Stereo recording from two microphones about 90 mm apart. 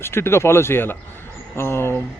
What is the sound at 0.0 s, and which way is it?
A man's voice, 25° left (ahead or behind).